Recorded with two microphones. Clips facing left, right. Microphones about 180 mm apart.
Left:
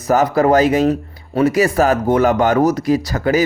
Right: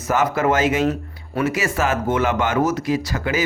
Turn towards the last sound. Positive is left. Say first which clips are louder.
# left 6 dB
turn(degrees=40)  # may be behind; listen again after turning